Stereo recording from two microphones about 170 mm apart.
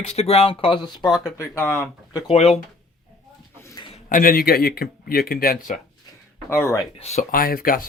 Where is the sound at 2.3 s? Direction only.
40° left (ahead or behind).